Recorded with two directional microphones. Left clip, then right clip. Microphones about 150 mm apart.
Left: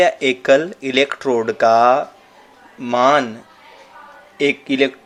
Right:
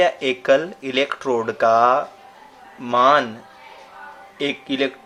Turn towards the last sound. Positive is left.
turn(degrees=35)  # may be behind; listen again after turning